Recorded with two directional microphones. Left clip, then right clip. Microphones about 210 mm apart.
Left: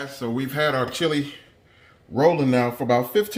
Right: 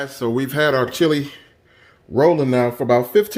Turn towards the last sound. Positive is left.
turn(degrees=-50)  # may be behind; listen again after turning